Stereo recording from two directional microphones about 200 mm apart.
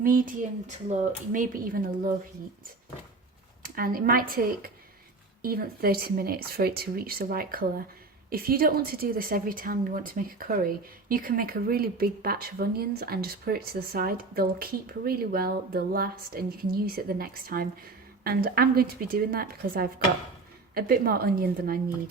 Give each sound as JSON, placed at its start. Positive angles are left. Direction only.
{"t": 0.0, "sound": "a woman's voice", "side_deg": -45}
{"t": 3.6, "sound": "a woman's voice", "side_deg": -45}